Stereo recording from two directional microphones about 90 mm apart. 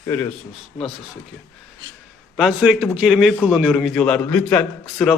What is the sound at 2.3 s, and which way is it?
A man's voice, centre (ahead or behind).